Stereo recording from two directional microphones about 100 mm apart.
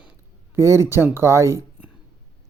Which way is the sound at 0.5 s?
25° right (ahead or behind).